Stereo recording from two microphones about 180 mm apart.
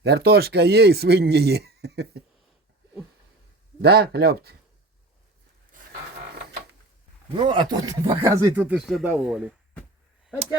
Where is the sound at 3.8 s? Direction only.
60° right (ahead or behind).